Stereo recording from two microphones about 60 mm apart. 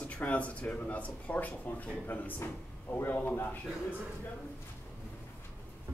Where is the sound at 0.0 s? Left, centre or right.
Left.